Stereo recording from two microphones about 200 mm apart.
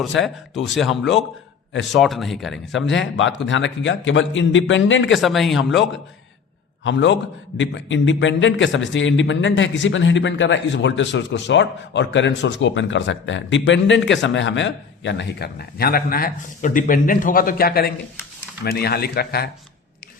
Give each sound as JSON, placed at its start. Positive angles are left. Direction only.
{"t": 1.7, "sound": "a man's voice", "side_deg": 65}
{"t": 2.0, "sound": "speech", "side_deg": 0}
{"t": 2.9, "sound": "a man's voice", "side_deg": 70}
{"t": 5.2, "sound": "speech", "side_deg": 0}
{"t": 6.8, "sound": "a man's voice", "side_deg": 65}